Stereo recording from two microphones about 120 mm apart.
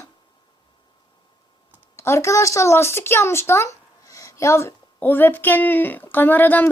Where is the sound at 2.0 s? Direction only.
25° left (ahead or behind).